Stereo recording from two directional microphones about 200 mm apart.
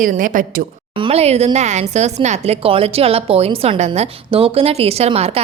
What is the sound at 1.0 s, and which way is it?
A woman's voice, 30° right (ahead or behind).